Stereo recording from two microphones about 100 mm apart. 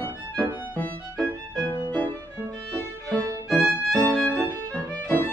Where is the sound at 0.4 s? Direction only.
10° left (ahead or behind).